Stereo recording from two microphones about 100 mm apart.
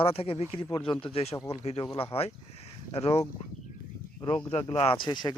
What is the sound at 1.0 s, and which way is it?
Speech, 85° left.